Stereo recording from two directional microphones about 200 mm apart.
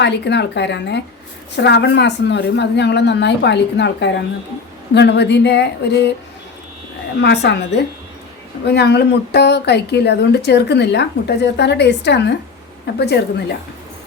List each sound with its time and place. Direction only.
0.0 s speech: 60° left (ahead or behind)
7.2 s speech: 55° left (ahead or behind)
8.6 s speech: 55° left (ahead or behind)